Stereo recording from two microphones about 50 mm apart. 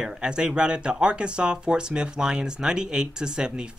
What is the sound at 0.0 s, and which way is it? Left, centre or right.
Speech, centre.